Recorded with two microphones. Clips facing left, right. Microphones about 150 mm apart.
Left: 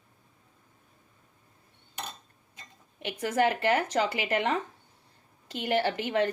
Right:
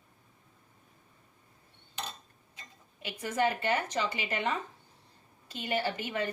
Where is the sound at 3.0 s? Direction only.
65° left (ahead or behind).